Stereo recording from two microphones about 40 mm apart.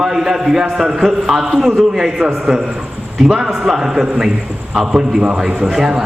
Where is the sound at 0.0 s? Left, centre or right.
Centre.